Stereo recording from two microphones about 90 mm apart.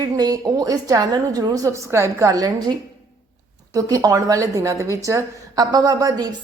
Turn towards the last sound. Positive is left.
turn(degrees=-45)  # may be behind; listen again after turning